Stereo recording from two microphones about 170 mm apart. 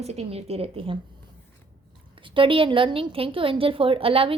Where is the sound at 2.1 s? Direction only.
30° right (ahead or behind).